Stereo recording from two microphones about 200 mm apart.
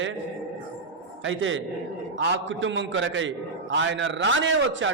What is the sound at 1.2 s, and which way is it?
A man's voice, 70° right (ahead or behind).